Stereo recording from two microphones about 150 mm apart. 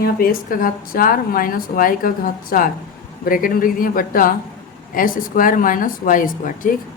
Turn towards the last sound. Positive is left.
turn(degrees=65)  # may be behind; listen again after turning